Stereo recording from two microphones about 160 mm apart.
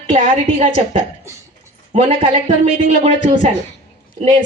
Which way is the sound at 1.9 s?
45° right (ahead or behind).